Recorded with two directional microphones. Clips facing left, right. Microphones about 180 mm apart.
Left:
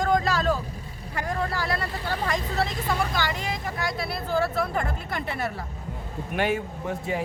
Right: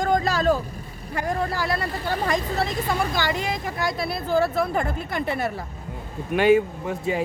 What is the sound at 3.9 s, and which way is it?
A woman's voice, 15° right (ahead or behind).